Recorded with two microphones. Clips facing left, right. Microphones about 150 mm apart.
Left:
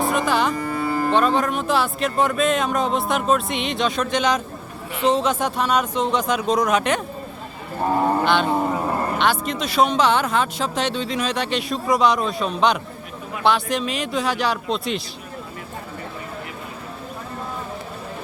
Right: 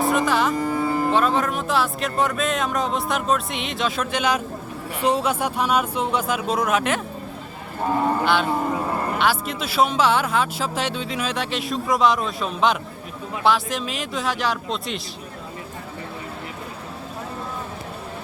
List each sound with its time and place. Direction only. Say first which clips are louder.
0.0 s music: even; centre (ahead or behind)
0.5 s music: right 1 dB; 15° right (ahead or behind)
1.1 s speech: left 1 dB; centre (ahead or behind)
8.2 s speech: left 2 dB; 5° right (ahead or behind)